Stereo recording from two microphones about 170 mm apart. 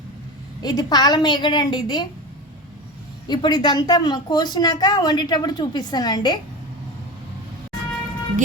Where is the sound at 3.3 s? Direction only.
25° left (ahead or behind).